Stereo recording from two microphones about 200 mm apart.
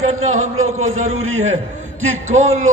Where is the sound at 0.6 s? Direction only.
90° right.